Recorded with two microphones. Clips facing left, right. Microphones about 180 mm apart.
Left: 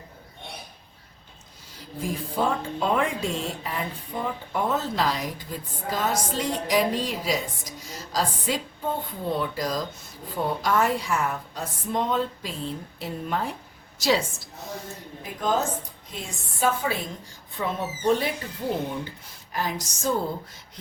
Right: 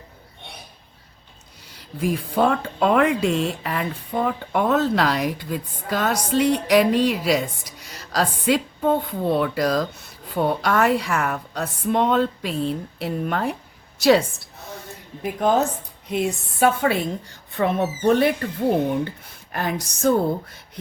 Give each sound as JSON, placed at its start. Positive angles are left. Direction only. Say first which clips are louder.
{"t": 1.7, "sound": "speech", "louder": "right 7 dB", "side_deg": -70}
{"t": 16.1, "sound": "speech", "louder": "right 13 dB", "side_deg": -65}